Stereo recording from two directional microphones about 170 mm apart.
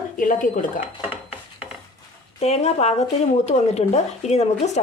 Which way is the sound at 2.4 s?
40° left (ahead or behind).